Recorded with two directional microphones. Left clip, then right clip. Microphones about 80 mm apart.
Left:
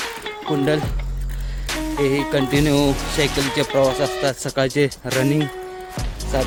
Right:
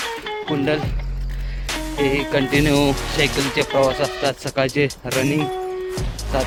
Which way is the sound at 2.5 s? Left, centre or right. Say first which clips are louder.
Right 1 dB; centre.